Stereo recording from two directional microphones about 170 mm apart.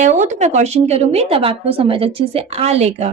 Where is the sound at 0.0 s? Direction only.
45° right (ahead or behind).